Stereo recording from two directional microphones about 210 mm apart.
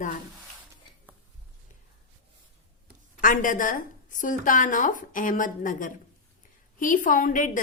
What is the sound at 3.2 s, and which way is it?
A woman's voice, 40° left (ahead or behind).